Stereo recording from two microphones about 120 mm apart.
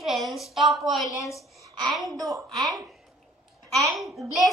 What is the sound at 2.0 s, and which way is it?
Speech, 30° right (ahead or behind).